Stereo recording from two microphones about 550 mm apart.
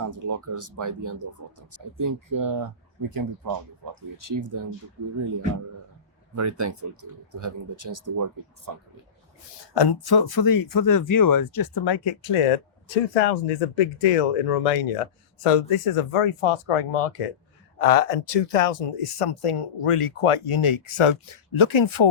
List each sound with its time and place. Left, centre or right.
0.0 s speech: right
6.3 s speech: right
9.7 s speech: left
17.7 s speech: left